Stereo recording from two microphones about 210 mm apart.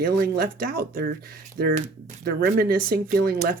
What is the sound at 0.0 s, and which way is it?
Speech, 45° right (ahead or behind).